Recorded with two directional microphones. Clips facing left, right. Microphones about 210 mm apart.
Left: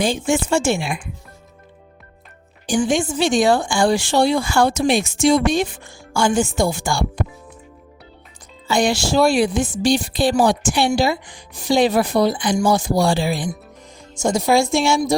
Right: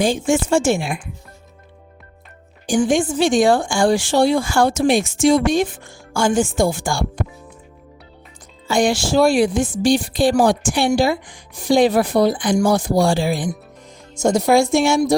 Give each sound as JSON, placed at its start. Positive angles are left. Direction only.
{"t": 0.3, "sound": "speech", "side_deg": -45}
{"t": 2.6, "sound": "speech", "side_deg": -50}
{"t": 8.6, "sound": "speech", "side_deg": -50}
{"t": 14.2, "sound": "a woman's voice", "side_deg": -60}